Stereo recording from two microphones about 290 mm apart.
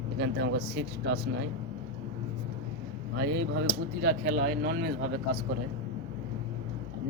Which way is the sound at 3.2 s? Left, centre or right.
Right.